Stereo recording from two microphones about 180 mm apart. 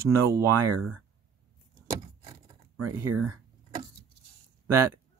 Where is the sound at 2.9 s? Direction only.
15° right (ahead or behind).